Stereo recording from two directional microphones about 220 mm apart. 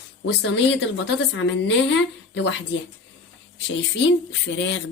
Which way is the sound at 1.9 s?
55° left (ahead or behind).